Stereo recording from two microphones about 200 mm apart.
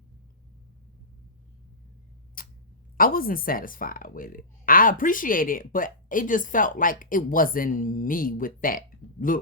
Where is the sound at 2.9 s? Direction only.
45° left (ahead or behind).